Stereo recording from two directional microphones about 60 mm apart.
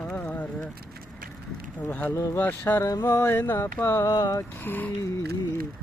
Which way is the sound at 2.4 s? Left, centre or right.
Left.